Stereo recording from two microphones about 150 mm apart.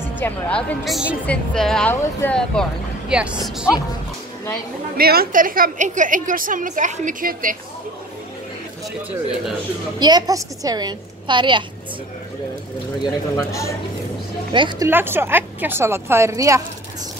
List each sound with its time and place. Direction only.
0.2 s speech: 10° left (ahead or behind)
3.1 s a woman's voice: 5° right (ahead or behind)
4.9 s a woman's voice: 90° right; by 7.5 s 65° right (ahead or behind)
9.9 s a woman's voice: 30° right (ahead or behind)
13.0 s a man's voice: 20° left (ahead or behind)
14.5 s speech: 30° right (ahead or behind)
14.9 s a woman's voice: 15° right (ahead or behind)